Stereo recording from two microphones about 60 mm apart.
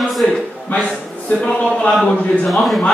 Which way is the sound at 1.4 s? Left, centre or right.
Centre.